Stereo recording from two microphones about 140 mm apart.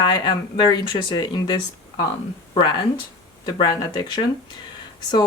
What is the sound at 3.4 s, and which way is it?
Speech, 30° left (ahead or behind).